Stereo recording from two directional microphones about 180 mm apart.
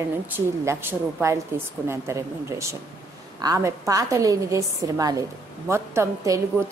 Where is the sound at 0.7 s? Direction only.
15° right (ahead or behind).